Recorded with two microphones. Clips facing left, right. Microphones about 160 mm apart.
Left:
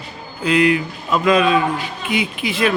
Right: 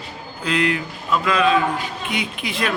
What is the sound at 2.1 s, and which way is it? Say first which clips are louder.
Speech: left 7 dB; 5° left (ahead or behind).